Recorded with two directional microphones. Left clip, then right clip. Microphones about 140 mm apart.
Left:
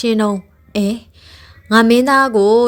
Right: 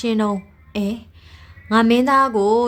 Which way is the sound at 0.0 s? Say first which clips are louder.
Left 5 dB; 30° left (ahead or behind).